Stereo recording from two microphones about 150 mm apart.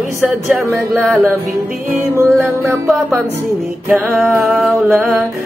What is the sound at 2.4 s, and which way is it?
Music, centre (ahead or behind).